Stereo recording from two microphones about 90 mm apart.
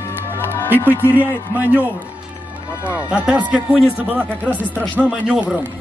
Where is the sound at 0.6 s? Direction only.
20° right (ahead or behind).